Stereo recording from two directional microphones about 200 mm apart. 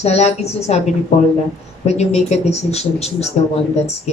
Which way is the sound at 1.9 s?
30° left (ahead or behind).